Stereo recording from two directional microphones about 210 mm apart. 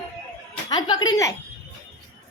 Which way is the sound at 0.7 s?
20° left (ahead or behind).